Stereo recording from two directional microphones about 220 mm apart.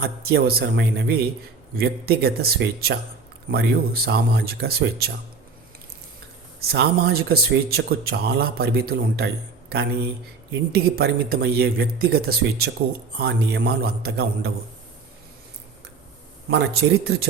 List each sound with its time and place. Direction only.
0.0 s speech: 45° right (ahead or behind)
6.6 s speech: 45° right (ahead or behind)
10.9 s speech: 45° right (ahead or behind)
16.5 s speech: 50° right (ahead or behind)